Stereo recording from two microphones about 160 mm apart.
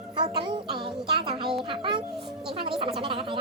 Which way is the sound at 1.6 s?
30° right (ahead or behind).